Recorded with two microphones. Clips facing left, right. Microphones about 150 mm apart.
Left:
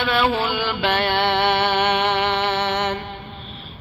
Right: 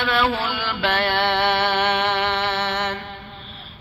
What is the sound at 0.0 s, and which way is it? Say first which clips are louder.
Mantra: left 2 dB; 10° left (ahead or behind).